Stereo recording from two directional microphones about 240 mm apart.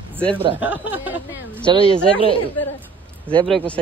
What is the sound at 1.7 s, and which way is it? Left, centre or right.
Speech, centre.